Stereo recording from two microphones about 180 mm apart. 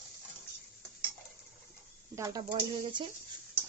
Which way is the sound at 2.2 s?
25° right (ahead or behind).